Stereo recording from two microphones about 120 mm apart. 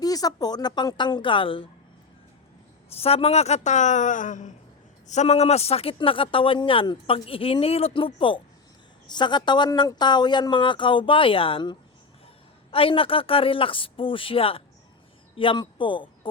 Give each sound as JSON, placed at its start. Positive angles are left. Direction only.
{"t": 0.0, "sound": "speech", "side_deg": 30}
{"t": 2.9, "sound": "speech", "side_deg": 55}
{"t": 5.0, "sound": "speech", "side_deg": 70}